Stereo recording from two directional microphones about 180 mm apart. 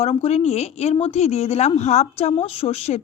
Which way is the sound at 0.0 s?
35° left (ahead or behind).